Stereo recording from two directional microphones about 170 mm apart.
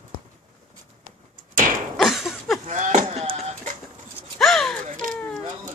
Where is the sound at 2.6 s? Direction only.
45° right (ahead or behind).